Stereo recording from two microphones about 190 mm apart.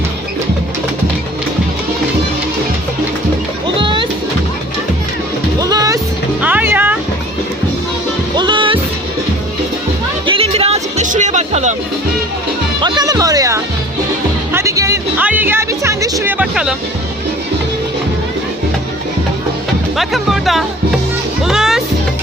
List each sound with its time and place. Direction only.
3.8 s music: 25° right (ahead or behind)
5.5 s music: 20° right (ahead or behind)
8.4 s music: 25° right (ahead or behind)
10.2 s music: 30° right (ahead or behind)
12.8 s music: 20° right (ahead or behind)
20.0 s speech: centre (ahead or behind)
21.4 s music: centre (ahead or behind)